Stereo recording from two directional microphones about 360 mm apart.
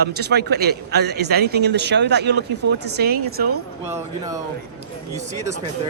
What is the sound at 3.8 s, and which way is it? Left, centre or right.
Speech, centre.